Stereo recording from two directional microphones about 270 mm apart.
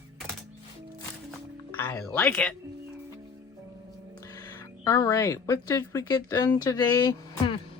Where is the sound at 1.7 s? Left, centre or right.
Centre.